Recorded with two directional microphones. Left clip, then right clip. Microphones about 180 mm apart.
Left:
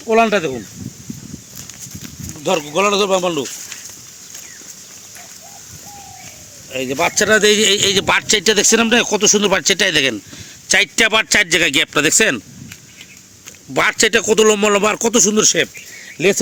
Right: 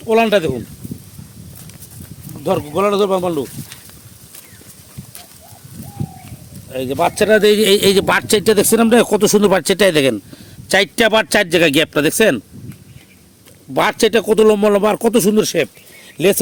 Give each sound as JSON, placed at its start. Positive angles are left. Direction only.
{"t": 0.1, "sound": "a man's voice", "side_deg": -55}
{"t": 2.4, "sound": "a man's voice", "side_deg": -50}
{"t": 6.7, "sound": "a man's voice", "side_deg": -35}
{"t": 13.7, "sound": "speech", "side_deg": -25}